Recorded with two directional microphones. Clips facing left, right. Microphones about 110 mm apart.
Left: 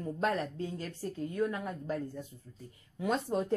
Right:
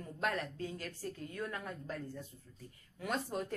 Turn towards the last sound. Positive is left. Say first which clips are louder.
# left 6 dB
turn(degrees=25)  # may be behind; listen again after turning